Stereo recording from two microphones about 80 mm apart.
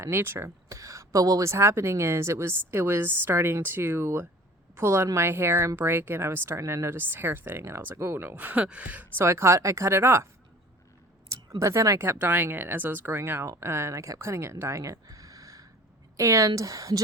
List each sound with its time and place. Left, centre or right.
0.0 s a woman's voice: right
9.1 s speech: right
11.6 s speech: right